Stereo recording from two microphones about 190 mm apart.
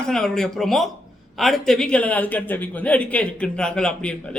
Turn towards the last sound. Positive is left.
turn(degrees=5)  # may be behind; listen again after turning